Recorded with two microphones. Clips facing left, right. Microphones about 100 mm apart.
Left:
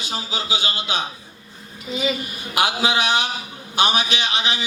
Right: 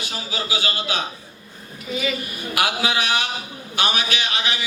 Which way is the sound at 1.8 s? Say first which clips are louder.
Left 1 dB; 20° left (ahead or behind).